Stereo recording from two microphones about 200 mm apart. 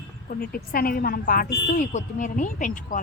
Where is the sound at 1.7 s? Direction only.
40° left (ahead or behind).